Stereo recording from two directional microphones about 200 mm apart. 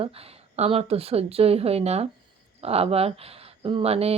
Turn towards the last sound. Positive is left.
turn(degrees=-30)  # may be behind; listen again after turning